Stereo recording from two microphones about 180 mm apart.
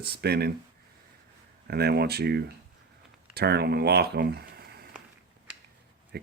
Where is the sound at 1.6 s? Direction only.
65° right (ahead or behind).